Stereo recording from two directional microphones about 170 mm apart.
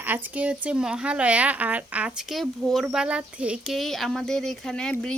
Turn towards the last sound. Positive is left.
turn(degrees=5)  # may be behind; listen again after turning